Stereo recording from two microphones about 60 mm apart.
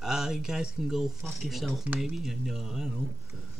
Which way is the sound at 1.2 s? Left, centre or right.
Centre.